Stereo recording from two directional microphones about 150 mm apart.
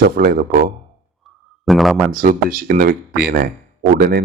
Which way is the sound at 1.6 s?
Centre (ahead or behind).